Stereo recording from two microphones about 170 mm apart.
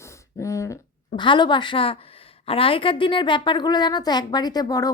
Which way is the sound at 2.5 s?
30° left (ahead or behind).